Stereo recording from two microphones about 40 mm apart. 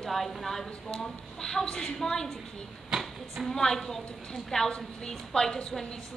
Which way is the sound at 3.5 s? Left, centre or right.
Centre.